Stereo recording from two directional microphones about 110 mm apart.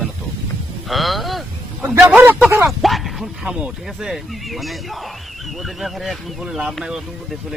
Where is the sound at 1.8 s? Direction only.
15° right (ahead or behind).